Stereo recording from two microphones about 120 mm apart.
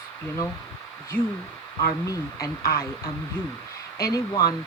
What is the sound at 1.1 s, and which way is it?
Speech, 15° left (ahead or behind).